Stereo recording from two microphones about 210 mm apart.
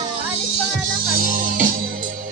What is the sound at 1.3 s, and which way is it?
Music, 40° right (ahead or behind).